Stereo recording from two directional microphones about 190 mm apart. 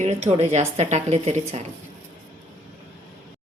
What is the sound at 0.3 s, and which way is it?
Speech, 35° right (ahead or behind).